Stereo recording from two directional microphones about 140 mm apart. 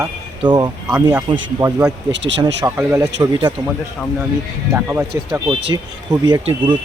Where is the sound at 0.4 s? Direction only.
30° right (ahead or behind).